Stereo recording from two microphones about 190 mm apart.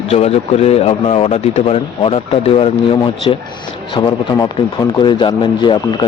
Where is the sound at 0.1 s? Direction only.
35° left (ahead or behind).